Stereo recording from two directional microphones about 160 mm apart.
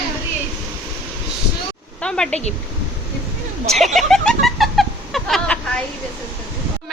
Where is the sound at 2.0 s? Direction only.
5° left (ahead or behind).